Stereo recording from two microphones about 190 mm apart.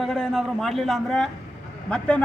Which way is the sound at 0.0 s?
Centre (ahead or behind).